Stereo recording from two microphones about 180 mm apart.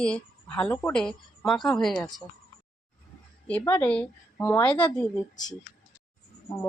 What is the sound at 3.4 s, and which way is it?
A woman's voice, 10° left (ahead or behind).